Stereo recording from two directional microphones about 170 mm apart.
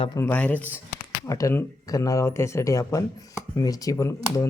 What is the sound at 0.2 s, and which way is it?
Speech, 10° left (ahead or behind).